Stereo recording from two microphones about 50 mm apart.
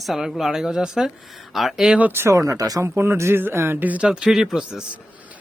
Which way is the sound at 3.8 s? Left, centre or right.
Right.